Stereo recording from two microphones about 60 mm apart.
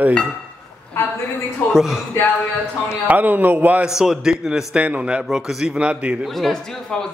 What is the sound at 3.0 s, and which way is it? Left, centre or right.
Speech, right.